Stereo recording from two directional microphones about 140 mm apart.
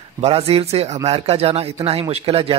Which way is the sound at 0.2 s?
45° right (ahead or behind).